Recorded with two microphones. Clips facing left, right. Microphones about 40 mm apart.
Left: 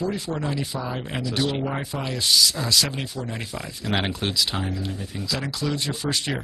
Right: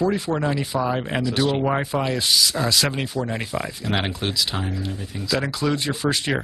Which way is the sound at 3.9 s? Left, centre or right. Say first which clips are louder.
Even; centre.